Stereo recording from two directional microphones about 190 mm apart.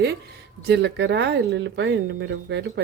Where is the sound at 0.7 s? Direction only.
65° right (ahead or behind).